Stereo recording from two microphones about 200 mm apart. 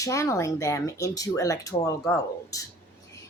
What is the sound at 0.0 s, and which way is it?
Speech, 15° left (ahead or behind).